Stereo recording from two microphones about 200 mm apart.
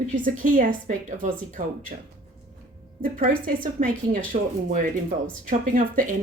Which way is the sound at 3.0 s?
45° right (ahead or behind).